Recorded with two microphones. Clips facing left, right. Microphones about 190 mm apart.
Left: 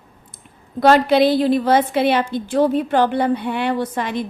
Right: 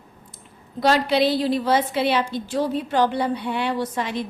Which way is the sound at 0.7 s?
50° left (ahead or behind).